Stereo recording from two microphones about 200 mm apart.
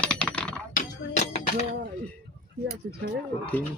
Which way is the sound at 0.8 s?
35° left (ahead or behind).